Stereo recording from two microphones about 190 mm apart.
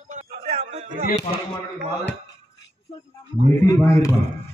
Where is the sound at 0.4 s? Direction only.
30° right (ahead or behind).